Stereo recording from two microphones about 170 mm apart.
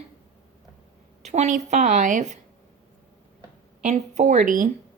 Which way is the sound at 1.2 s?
45° right (ahead or behind).